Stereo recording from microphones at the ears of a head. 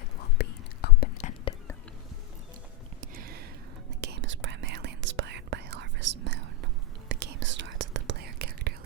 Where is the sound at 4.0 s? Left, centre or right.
Right.